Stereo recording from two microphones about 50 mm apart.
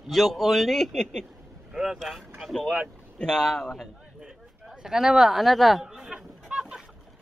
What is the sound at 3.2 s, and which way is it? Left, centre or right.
Speech, centre.